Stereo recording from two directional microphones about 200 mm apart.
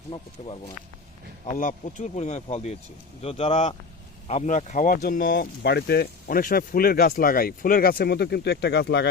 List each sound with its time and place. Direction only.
0.1 s speech: 25° left (ahead or behind)
1.5 s speech: 40° left (ahead or behind); by 9.0 s 60° left (ahead or behind)